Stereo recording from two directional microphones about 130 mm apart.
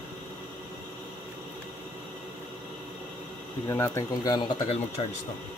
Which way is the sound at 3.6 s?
20° left (ahead or behind).